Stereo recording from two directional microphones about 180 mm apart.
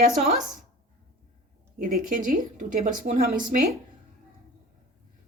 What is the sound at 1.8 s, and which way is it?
Speech, 50° right (ahead or behind).